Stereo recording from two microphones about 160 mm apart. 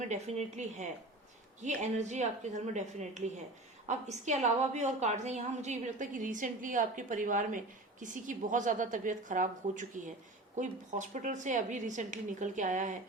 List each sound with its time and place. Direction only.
0.0 s a woman's voice: 45° right (ahead or behind)